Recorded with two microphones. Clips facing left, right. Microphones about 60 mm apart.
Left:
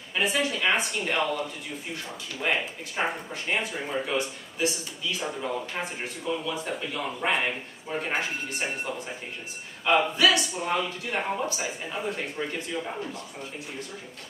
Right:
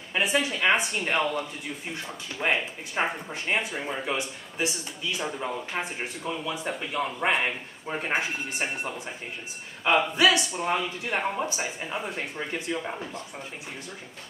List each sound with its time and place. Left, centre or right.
0.2 s speech: centre
2.5 s speech: centre
10.2 s speech: centre
10.6 s speech: centre